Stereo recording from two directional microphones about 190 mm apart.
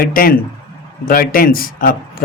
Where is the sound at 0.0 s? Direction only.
50° left (ahead or behind).